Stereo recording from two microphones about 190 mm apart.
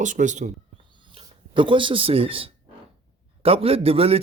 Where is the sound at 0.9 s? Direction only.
25° right (ahead or behind).